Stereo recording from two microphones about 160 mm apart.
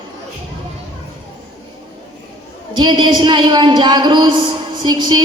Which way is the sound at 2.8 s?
30° right (ahead or behind).